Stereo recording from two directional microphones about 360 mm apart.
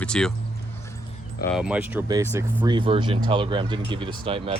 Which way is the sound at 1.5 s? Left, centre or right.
Centre.